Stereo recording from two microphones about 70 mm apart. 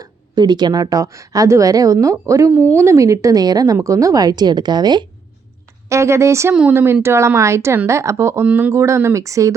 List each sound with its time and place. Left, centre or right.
0.0 s speech: right
3.8 s speech: right
5.9 s speech: right
6.5 s speech: centre
6.7 s speech: right